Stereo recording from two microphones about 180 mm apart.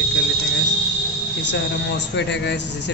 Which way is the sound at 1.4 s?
75° left (ahead or behind).